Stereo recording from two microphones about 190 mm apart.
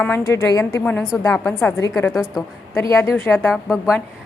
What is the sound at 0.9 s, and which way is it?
A woman's voice, 5° left (ahead or behind).